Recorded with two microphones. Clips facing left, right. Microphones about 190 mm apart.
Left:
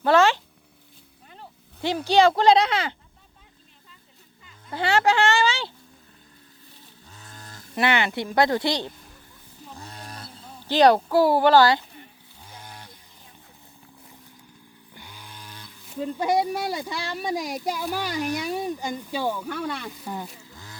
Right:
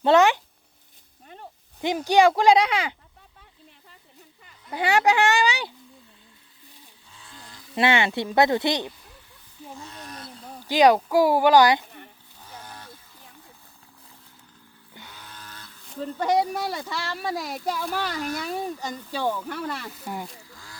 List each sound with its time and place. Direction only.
0.0 s speech: 20° right (ahead or behind)
2.0 s speech: 15° right (ahead or behind)
4.7 s speech: 15° right (ahead or behind)
7.1 s a sound: 45° left (ahead or behind)
7.8 s speech: 25° right (ahead or behind)
9.7 s roaring cats: 35° left (ahead or behind)
10.7 s speech: 10° right (ahead or behind)
12.4 s a sound: 10° left (ahead or behind)
15.0 s speech: 10° left (ahead or behind)
19.5 s speech: 5° right (ahead or behind)
20.4 s wild animals: 20° left (ahead or behind)